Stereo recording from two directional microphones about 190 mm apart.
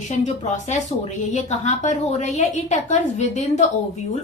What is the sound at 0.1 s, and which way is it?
A woman's voice, 40° left (ahead or behind).